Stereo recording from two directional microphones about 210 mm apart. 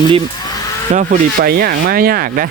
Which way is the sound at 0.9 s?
40° right (ahead or behind).